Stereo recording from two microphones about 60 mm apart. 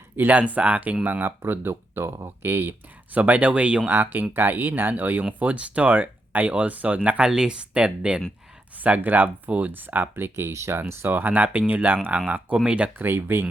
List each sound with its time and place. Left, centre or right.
0.2 s speech: right
3.2 s speech: right
3.8 s speech: right
7.3 s speech: centre
8.8 s speech: right
11.1 s speech: right
13.0 s speech: right